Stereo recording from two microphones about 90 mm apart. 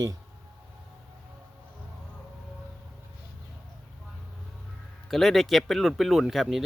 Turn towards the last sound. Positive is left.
turn(degrees=-5)  # may be behind; listen again after turning